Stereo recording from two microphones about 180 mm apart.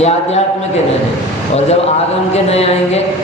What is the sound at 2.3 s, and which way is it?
Speech, 35° left (ahead or behind).